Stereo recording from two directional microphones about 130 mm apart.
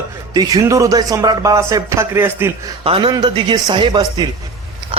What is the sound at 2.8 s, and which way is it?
Speech, 45° right (ahead or behind).